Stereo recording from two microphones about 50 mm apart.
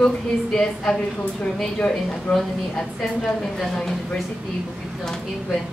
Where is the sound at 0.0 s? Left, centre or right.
Centre.